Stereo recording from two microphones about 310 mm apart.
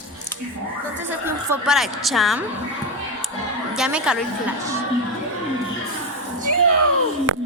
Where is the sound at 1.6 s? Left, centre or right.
Centre.